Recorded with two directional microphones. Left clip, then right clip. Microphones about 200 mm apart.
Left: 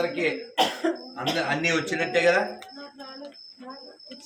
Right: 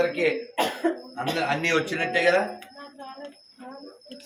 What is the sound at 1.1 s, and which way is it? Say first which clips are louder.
A man's voice: even; 15° left (ahead or behind).